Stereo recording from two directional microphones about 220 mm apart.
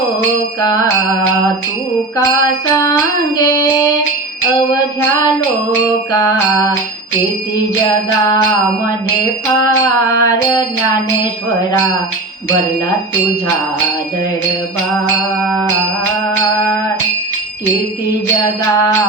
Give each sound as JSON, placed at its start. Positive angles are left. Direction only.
{"t": 3.3, "sound": "child singing", "side_deg": 15}
{"t": 6.1, "sound": "music", "side_deg": 15}
{"t": 10.1, "sound": "music", "side_deg": 15}